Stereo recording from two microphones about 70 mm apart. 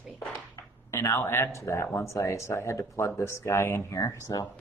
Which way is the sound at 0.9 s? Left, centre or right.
Left.